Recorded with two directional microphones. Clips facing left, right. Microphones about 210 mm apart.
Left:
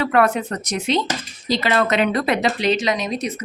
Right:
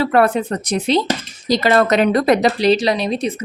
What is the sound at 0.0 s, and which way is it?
Speech, 35° right (ahead or behind).